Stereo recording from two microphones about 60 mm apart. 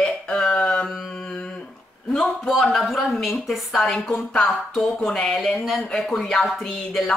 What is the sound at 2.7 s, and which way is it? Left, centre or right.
Speech, centre.